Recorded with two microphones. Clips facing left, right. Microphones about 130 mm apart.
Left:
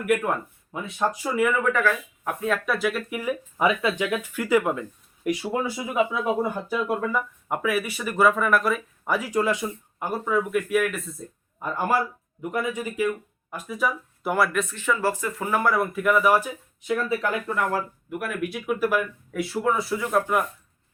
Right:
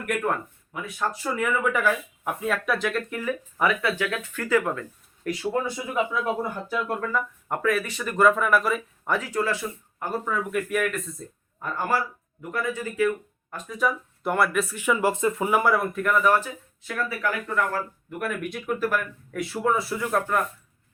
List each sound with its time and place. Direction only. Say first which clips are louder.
0.0 s speech: left 3 dB; 10° left (ahead or behind)
0.7 s speech: left 3 dB; 25° left (ahead or behind)
1.4 s speech: left 3 dB; centre (ahead or behind)
1.7 s speech: left 1 dB; 10° right (ahead or behind)
11.6 s speech: left 2 dB; 15° left (ahead or behind)
13.5 s speech: even; 5° left (ahead or behind); by 15.7 s 10° right (ahead or behind)
15.7 s speech: left 1 dB; centre (ahead or behind); by 17.7 s 20° left (ahead or behind)
18.2 s speech: even; 5° left (ahead or behind)